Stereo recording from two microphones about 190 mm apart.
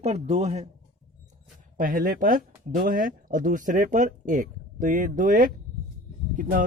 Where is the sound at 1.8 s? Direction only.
45° right (ahead or behind).